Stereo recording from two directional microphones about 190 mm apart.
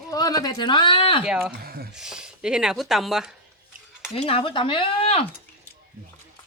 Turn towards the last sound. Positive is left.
turn(degrees=30)  # may be behind; listen again after turning